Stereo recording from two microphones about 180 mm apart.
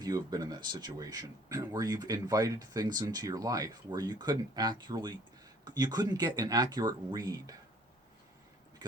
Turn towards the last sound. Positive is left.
turn(degrees=-20)  # may be behind; listen again after turning